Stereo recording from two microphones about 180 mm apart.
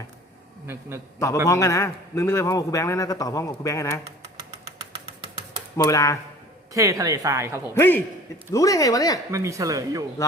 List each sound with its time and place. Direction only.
0.7 s speech: 15° right (ahead or behind)
1.5 s a man's voice: 15° left (ahead or behind)
5.7 s a man's voice: 15° left (ahead or behind)
6.7 s speech: 20° right (ahead or behind)
7.7 s a man's voice: 10° left (ahead or behind)
9.3 s speech: 15° right (ahead or behind)